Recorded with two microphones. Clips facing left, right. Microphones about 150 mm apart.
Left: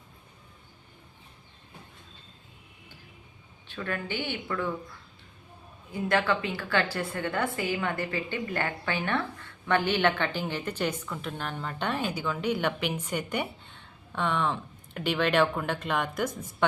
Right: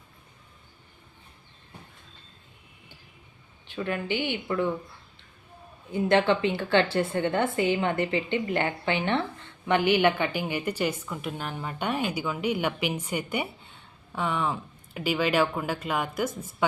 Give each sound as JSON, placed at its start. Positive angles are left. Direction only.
{"t": 3.7, "sound": "a woman's voice", "side_deg": -15}
{"t": 5.9, "sound": "a woman's voice", "side_deg": -25}